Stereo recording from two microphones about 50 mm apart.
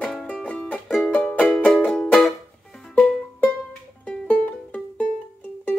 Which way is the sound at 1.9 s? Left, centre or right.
Centre.